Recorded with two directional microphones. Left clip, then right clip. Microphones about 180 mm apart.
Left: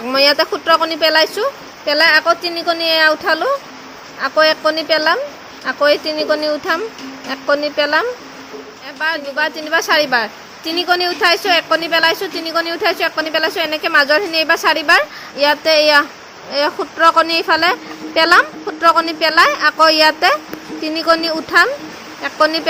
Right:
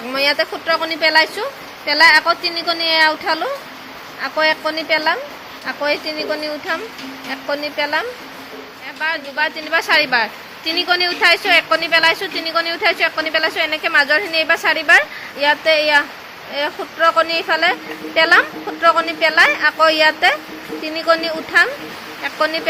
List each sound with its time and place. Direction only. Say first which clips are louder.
0.1 s speech: left 4 dB; 45° left (ahead or behind)